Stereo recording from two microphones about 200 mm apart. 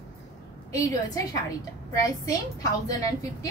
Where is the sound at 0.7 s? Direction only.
20° left (ahead or behind).